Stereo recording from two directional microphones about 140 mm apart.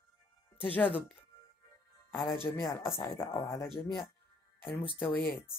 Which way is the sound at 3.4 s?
30° left (ahead or behind).